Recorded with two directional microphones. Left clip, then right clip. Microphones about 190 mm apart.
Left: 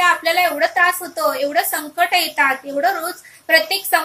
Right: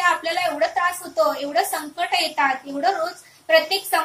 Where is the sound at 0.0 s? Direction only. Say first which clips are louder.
Left 5 dB; 25° left (ahead or behind).